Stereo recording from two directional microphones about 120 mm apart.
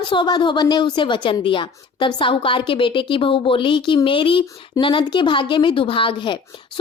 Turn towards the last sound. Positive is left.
turn(degrees=45)  # may be behind; listen again after turning